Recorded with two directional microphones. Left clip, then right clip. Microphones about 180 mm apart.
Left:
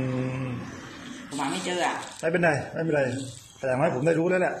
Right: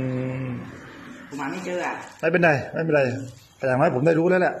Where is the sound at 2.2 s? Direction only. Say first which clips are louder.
Right 5 dB; 30° right (ahead or behind).